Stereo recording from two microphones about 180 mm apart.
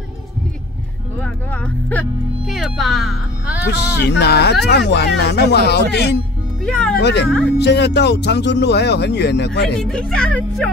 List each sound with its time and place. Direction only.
1.2 s music: 10° left (ahead or behind)
3.7 s speech: 70° left (ahead or behind)
6.6 s a woman's voice: 5° left (ahead or behind)
7.0 s speech: 70° left (ahead or behind)
9.8 s a woman's voice: 5° left (ahead or behind)